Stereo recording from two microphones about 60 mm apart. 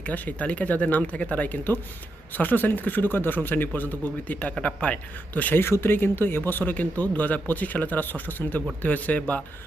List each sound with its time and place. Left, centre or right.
0.0 s speech: left
5.5 s speech: left